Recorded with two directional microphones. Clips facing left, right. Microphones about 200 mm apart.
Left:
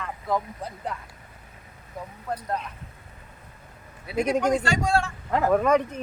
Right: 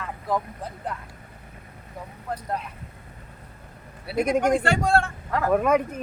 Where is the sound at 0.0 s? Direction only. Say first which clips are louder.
Even; centre (ahead or behind).